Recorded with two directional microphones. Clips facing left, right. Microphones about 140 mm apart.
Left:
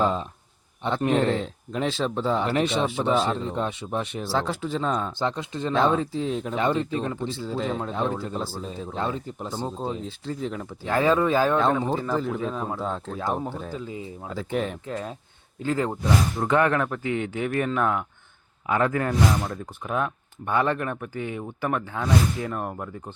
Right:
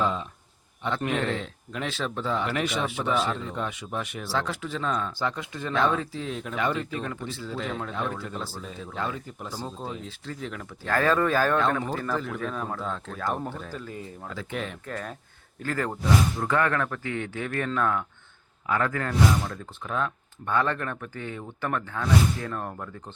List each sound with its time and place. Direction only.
0.0 s speech: 35° left (ahead or behind)
10.8 s speech: 15° left (ahead or behind); by 12.4 s 30° left (ahead or behind)
12.4 s speech: 15° left (ahead or behind)
12.8 s speech: 30° left (ahead or behind)
13.1 s speech: 20° left (ahead or behind)
14.3 s speech: 35° left (ahead or behind)
14.8 s speech: 20° left (ahead or behind)